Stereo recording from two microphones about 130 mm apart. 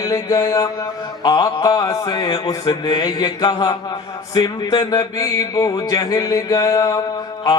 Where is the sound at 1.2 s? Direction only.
30° left (ahead or behind).